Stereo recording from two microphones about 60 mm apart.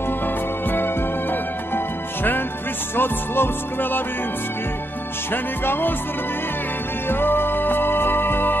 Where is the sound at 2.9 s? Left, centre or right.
Left.